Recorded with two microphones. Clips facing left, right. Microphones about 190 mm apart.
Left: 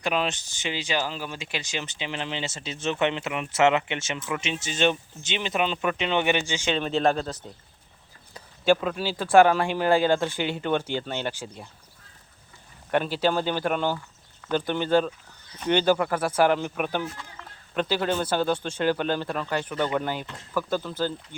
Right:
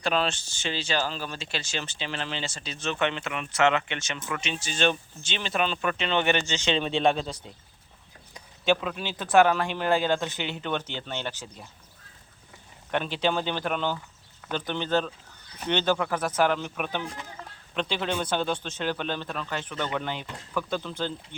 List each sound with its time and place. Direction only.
0.0 s speech: 15° left (ahead or behind)
8.6 s speech: 10° left (ahead or behind)
12.9 s speech: 5° left (ahead or behind)